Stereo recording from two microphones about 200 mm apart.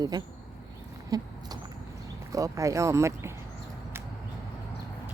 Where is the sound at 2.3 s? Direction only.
15° right (ahead or behind).